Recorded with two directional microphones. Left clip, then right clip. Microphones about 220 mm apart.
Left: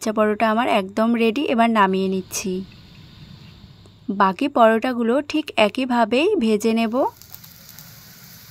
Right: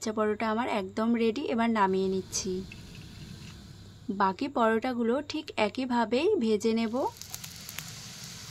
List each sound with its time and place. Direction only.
0.0 s a woman's voice: 40° left (ahead or behind)
4.2 s a woman's voice: 40° left (ahead or behind)